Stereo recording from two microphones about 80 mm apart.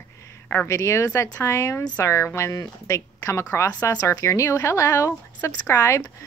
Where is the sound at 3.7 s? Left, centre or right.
Left.